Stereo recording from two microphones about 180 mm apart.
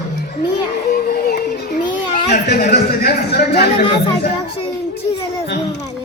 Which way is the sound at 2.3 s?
60° left (ahead or behind).